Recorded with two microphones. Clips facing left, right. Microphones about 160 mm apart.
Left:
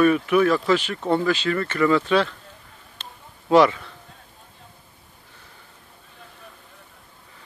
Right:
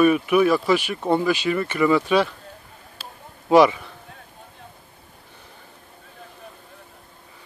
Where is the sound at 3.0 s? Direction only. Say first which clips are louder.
Right 2 dB; 15° right (ahead or behind).